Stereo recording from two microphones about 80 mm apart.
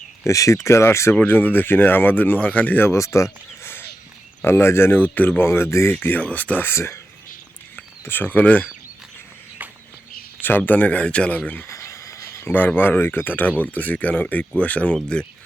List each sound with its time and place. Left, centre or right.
0.3 s speech: left
1.1 s speech: left
3.6 s a sound: left
4.4 s speech: left
8.0 s speech: left
9.6 s a sound: centre
10.7 s speech: left
11.7 s a sound: left
12.5 s speech: left